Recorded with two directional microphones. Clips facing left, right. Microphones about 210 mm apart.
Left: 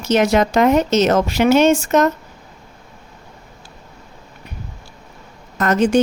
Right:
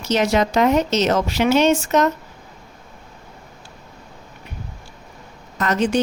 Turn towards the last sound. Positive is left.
turn(degrees=45)  # may be behind; listen again after turning